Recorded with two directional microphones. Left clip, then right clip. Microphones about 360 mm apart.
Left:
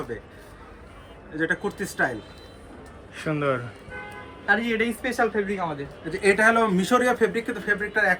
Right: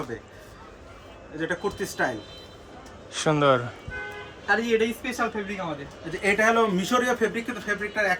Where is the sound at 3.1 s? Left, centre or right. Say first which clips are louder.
Right 5 dB; centre.